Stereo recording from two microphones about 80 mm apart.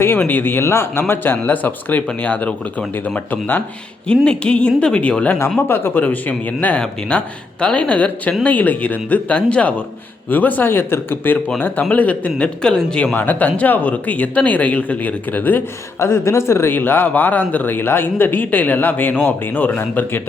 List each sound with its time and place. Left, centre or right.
0.0 s speech: left
4.1 s speech: centre
5.5 s speech: left; by 13.1 s centre
13.1 s speech: left